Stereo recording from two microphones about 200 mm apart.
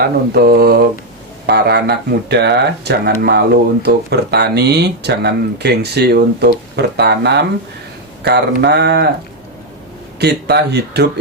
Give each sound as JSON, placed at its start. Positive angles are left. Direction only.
{"t": 0.3, "sound": "mantra", "side_deg": -55}
{"t": 1.5, "sound": "speech", "side_deg": -55}
{"t": 10.2, "sound": "speech", "side_deg": -55}